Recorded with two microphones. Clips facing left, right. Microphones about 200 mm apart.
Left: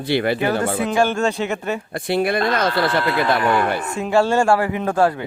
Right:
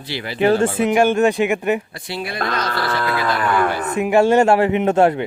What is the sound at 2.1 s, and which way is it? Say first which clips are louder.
Speech: left 5 dB; 55° left (ahead or behind).